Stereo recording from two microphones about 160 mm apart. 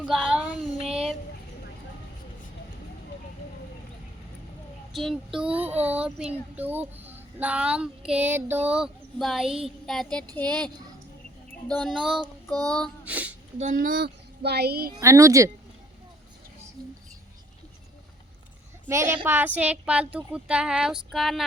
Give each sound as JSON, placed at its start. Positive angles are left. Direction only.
{"t": 0.0, "sound": "child singing", "side_deg": 0}
{"t": 4.9, "sound": "speech", "side_deg": 0}
{"t": 11.7, "sound": "speech", "side_deg": 0}
{"t": 13.1, "sound": "speech", "side_deg": -10}
{"t": 13.6, "sound": "speech", "side_deg": -55}
{"t": 14.9, "sound": "a woman's voice", "side_deg": -20}
{"t": 18.9, "sound": "speech", "side_deg": -15}